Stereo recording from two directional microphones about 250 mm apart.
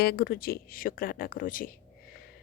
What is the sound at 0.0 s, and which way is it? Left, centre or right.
Speech, left.